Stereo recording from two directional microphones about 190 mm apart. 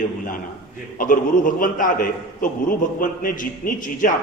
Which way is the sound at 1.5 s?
45° left (ahead or behind).